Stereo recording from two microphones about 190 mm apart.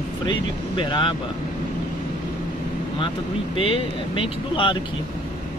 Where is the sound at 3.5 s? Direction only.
30° left (ahead or behind).